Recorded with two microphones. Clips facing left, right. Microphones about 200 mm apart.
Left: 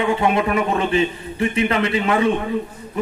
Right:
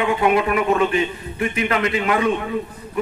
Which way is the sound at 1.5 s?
30° left (ahead or behind).